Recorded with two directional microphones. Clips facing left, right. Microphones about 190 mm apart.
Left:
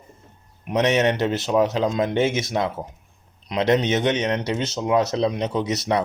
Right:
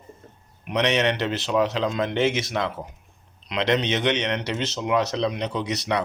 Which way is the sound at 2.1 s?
20° left (ahead or behind).